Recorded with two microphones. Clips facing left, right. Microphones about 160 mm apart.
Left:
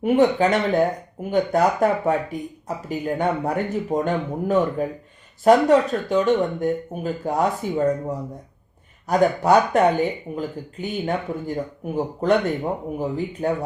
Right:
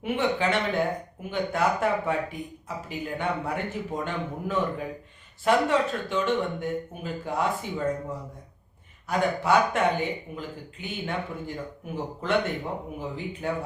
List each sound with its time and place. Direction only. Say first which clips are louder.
0.0 s speech: left 9 dB; 40° left (ahead or behind)